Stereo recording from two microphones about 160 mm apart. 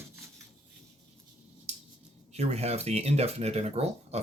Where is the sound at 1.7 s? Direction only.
40° right (ahead or behind).